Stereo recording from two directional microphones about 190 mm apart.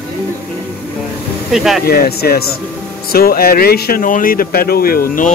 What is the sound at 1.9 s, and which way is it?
Speech, 55° left (ahead or behind).